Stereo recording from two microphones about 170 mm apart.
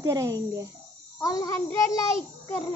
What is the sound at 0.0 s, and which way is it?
Speech, 20° right (ahead or behind).